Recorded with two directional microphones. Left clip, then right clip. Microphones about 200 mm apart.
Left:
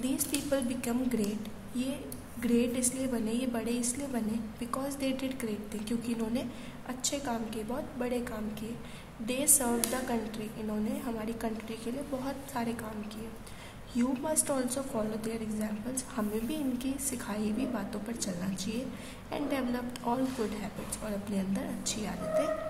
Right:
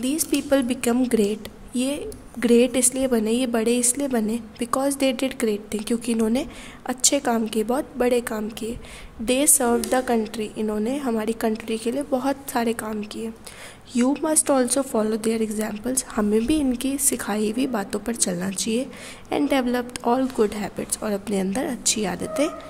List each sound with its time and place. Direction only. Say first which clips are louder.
0.0 s a woman's voice: right 9 dB; 40° right (ahead or behind)
13.9 s a woman's voice: right 10 dB; 45° right (ahead or behind)